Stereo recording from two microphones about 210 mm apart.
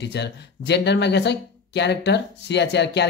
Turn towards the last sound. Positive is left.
turn(degrees=55)  # may be behind; listen again after turning